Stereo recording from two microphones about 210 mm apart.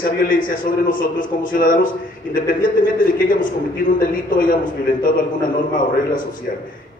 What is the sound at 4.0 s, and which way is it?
Speech, 40° left (ahead or behind).